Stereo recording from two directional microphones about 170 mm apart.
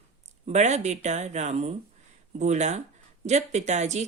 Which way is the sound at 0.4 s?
45° right (ahead or behind).